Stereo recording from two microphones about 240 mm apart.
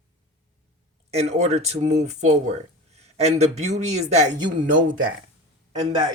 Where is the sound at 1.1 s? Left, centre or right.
Right.